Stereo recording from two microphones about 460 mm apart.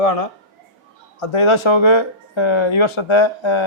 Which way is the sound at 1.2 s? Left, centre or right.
Left.